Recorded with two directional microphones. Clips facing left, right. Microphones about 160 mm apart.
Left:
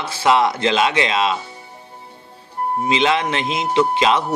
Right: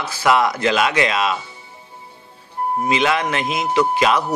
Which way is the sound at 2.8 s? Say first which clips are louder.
Left 1 dB; 25° left (ahead or behind).